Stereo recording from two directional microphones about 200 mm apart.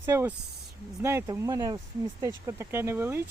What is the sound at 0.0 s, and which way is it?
Speech, 15° right (ahead or behind).